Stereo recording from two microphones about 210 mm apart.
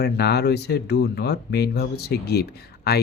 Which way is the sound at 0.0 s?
50° left (ahead or behind).